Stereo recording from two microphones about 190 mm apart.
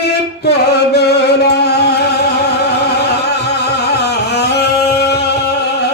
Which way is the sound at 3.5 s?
60° left (ahead or behind).